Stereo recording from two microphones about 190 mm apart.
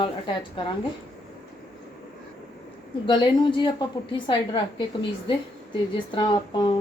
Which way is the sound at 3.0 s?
25° left (ahead or behind).